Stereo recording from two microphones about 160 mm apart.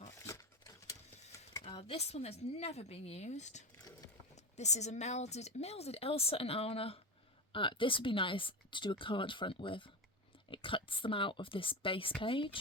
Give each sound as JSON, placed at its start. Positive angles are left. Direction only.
{"t": 1.6, "sound": "speech", "side_deg": 35}